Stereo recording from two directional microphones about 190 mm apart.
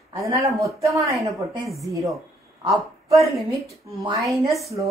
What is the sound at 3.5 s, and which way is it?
Speech, 15° right (ahead or behind).